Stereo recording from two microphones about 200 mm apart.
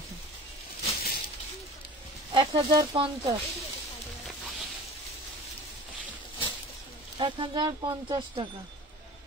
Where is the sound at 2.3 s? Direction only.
25° right (ahead or behind).